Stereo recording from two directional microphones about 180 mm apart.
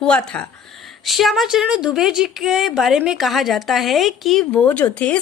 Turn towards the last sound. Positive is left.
turn(degrees=5)  # may be behind; listen again after turning